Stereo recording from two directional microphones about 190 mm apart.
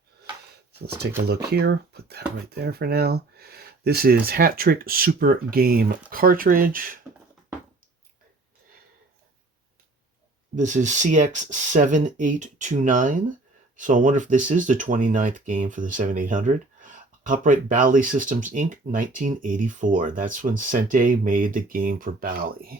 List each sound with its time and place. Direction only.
1.3 s speech: 55° right (ahead or behind)
10.5 s speech: 40° right (ahead or behind)